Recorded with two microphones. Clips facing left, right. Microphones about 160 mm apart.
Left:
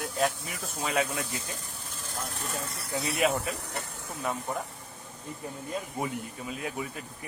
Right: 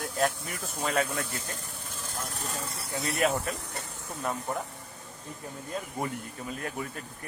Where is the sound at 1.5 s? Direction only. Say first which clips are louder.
Right 1 dB; 50° right (ahead or behind).